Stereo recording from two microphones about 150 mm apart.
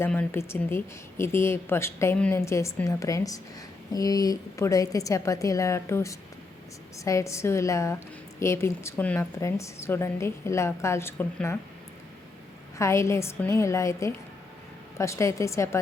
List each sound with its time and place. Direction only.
0.0 s a woman's voice: 15° left (ahead or behind)
12.8 s a woman's voice: 20° left (ahead or behind)